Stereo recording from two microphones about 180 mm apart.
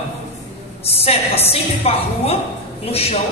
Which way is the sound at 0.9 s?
35° left (ahead or behind).